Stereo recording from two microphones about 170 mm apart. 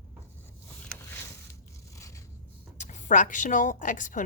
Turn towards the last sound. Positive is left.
turn(degrees=50)  # may be behind; listen again after turning